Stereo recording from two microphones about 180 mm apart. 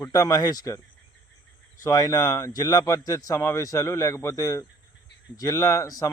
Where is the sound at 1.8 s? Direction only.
20° left (ahead or behind).